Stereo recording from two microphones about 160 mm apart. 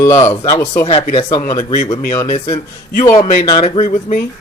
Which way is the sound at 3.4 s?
35° left (ahead or behind).